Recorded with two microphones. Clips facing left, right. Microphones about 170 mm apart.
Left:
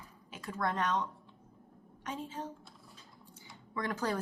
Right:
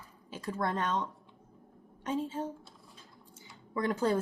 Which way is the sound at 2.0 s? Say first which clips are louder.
Right 7 dB; 30° right (ahead or behind).